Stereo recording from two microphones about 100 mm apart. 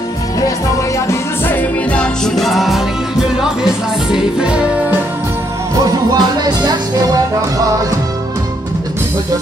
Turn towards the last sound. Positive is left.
turn(degrees=-35)  # may be behind; listen again after turning